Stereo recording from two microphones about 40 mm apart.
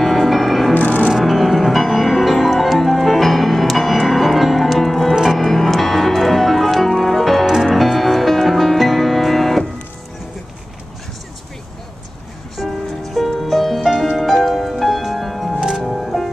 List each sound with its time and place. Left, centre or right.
0.0 s music: centre
0.7 s music: left
1.1 s music: centre
5.1 s music: centre
5.4 s music: centre
12.5 s music: centre
15.5 s music: centre
15.8 s music: centre